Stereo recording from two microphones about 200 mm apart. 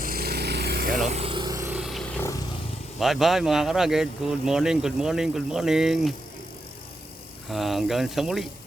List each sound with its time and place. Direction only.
0.0 s a sound: 50° right (ahead or behind)
0.9 s vehicle: centre (ahead or behind)
1.1 s vehicle: 25° right (ahead or behind); by 2.2 s centre (ahead or behind)
3.0 s speech: centre (ahead or behind)
7.5 s speech: centre (ahead or behind)